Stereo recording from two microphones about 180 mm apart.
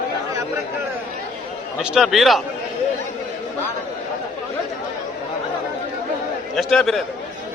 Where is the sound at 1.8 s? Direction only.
5° right (ahead or behind).